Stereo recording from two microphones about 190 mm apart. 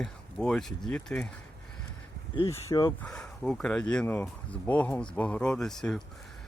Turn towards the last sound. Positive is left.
turn(degrees=0)  # may be behind; listen again after turning